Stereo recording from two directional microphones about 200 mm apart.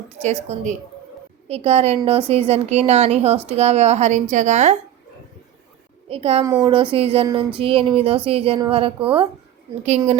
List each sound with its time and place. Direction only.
0.4 s a woman's voice: 40° right (ahead or behind)
6.1 s speech: 30° right (ahead or behind)